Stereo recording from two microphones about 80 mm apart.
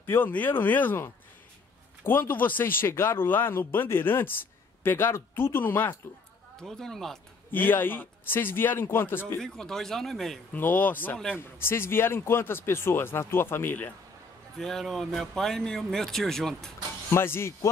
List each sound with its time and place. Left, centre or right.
0.0 s speech: left
6.6 s speech: centre
7.5 s speech: left
9.4 s speech: centre
10.5 s speech: left
14.6 s speech: centre
17.1 s speech: left